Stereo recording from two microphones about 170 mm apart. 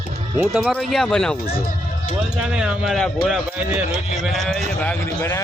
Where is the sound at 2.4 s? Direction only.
5° right (ahead or behind).